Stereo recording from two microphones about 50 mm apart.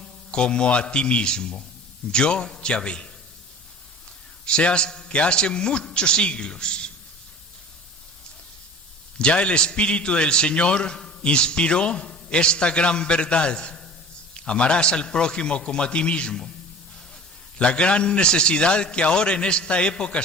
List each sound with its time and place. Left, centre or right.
0.0 s a man's voice: centre
4.4 s a man's voice: left
9.1 s a man's voice: centre
17.6 s a man's voice: centre